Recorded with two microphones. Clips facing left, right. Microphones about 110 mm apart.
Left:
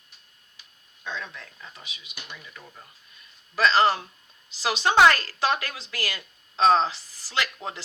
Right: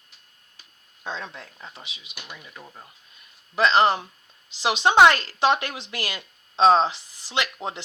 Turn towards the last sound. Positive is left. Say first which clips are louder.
# right 2 dB
turn(degrees=-20)  # may be behind; listen again after turning